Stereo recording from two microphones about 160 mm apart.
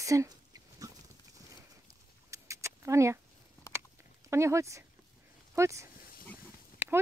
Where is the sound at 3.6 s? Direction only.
20° left (ahead or behind).